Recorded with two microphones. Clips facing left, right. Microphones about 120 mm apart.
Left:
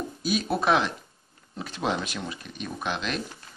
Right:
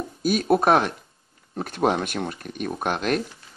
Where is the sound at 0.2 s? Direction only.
50° right (ahead or behind).